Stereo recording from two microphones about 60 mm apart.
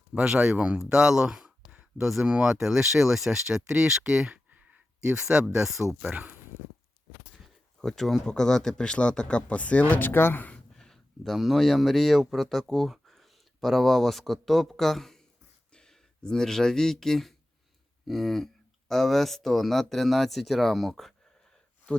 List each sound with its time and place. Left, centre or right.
0.2 s speech: centre
4.5 s a sound: right
5.2 s speech: centre
7.3 s speech: centre; by 9.8 s left
9.9 s speech: left
10.8 s speech: centre